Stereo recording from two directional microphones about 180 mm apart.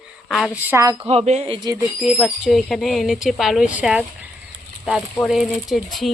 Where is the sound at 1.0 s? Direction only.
35° right (ahead or behind).